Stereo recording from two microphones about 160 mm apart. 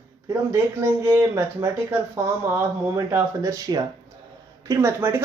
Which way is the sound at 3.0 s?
20° right (ahead or behind).